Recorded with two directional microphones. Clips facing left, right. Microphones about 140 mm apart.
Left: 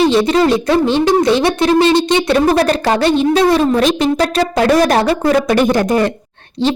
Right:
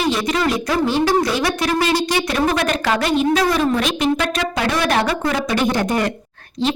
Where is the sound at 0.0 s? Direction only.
30° left (ahead or behind).